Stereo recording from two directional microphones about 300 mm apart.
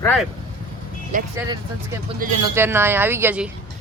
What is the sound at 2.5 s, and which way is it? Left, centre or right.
Speech, centre.